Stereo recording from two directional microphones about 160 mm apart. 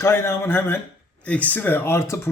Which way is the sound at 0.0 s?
15° left (ahead or behind).